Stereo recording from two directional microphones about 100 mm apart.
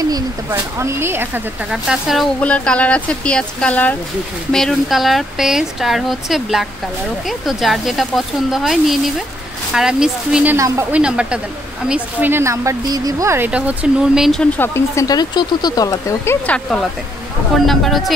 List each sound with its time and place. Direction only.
0.0 s speech: 35° right (ahead or behind)
1.7 s speech: 5° right (ahead or behind)
2.4 s speech: 10° left (ahead or behind); by 10.5 s 5° right (ahead or behind)
10.5 s speech: 30° right (ahead or behind)
10.9 s speech: 10° right (ahead or behind); by 12.7 s 25° right (ahead or behind)
12.8 s speech: 40° right (ahead or behind)
13.5 s speech: 10° right (ahead or behind)
14.4 s speech: 25° left (ahead or behind)
15.0 s speech: 45° left (ahead or behind)
16.4 s speech: 10° left (ahead or behind)